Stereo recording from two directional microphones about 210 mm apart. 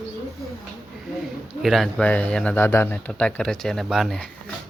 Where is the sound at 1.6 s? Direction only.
Centre (ahead or behind).